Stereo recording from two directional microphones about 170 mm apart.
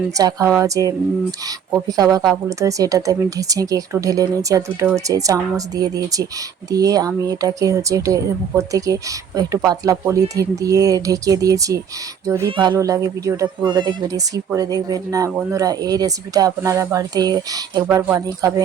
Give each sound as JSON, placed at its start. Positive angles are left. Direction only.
{"t": 0.1, "sound": "speech", "side_deg": -20}
{"t": 12.5, "sound": "speech", "side_deg": -30}